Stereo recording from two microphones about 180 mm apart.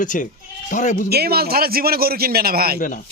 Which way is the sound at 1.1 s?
60° right (ahead or behind).